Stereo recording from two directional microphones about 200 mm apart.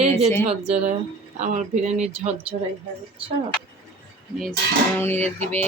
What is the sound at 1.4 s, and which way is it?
Speech, 40° right (ahead or behind).